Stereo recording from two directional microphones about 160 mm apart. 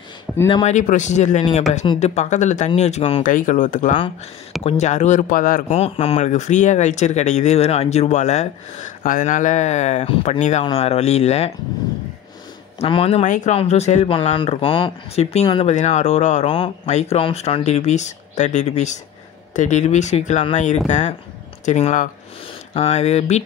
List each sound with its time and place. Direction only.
0.3 s a sound: centre (ahead or behind)
0.7 s speech: 50° left (ahead or behind)
3.3 s speech: 55° left (ahead or behind)
5.7 s speech: 40° left (ahead or behind)
12.7 s speech: 35° left (ahead or behind)
13.2 s speech: 50° left (ahead or behind)
15.6 s speech: 45° left (ahead or behind)
16.4 s speech: 30° left (ahead or behind)